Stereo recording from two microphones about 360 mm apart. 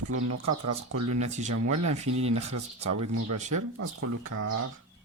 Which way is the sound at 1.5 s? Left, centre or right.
Right.